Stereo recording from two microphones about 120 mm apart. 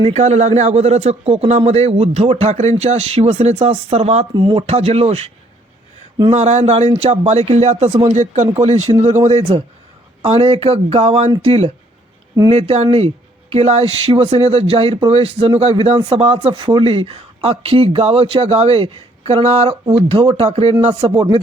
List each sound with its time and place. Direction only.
0.0 s a man's voice: 65° right (ahead or behind)
4.4 s speech: 40° right (ahead or behind)
4.6 s a man's voice: 60° right (ahead or behind)
6.3 s a man's voice: 70° right (ahead or behind)
8.1 s speech: 75° right (ahead or behind)
8.5 s a man's voice: 60° right (ahead or behind)
21.0 s speech: 35° right (ahead or behind)